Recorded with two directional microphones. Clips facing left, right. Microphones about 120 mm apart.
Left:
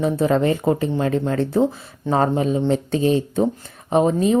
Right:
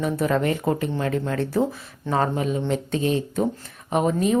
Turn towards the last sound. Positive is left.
turn(degrees=30)  # may be behind; listen again after turning